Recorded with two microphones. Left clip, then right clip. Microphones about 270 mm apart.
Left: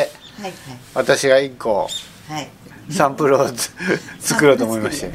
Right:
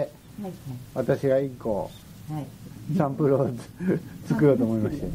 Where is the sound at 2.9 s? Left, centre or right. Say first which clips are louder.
Left 9 dB; centre.